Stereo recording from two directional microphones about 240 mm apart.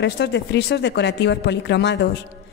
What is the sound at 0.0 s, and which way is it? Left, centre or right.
A woman's voice, left.